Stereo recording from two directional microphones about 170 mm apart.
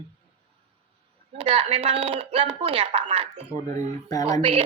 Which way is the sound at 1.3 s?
35° right (ahead or behind).